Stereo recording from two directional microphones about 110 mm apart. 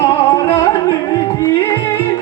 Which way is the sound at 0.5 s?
30° left (ahead or behind).